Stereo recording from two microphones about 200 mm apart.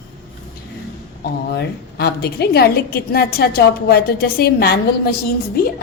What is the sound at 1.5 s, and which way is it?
A woman's voice, 55° left (ahead or behind).